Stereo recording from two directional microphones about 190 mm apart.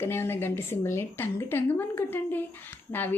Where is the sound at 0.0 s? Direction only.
10° left (ahead or behind).